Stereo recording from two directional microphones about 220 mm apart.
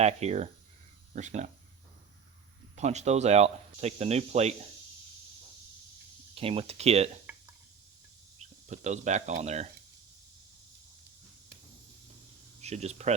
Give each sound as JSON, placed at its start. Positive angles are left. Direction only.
{"t": 0.0, "sound": "speech", "side_deg": -30}
{"t": 2.7, "sound": "speech", "side_deg": -30}
{"t": 6.3, "sound": "speech", "side_deg": -25}
{"t": 8.4, "sound": "speech", "side_deg": -30}
{"t": 12.6, "sound": "speech", "side_deg": -30}